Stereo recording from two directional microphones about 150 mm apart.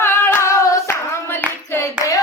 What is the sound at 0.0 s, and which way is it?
Singing, 15° left (ahead or behind).